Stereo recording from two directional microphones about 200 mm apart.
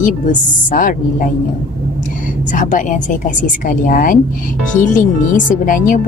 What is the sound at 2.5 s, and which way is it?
Speech, 40° left (ahead or behind).